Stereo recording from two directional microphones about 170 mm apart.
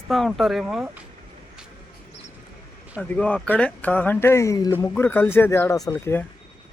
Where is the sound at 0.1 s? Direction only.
Centre (ahead or behind).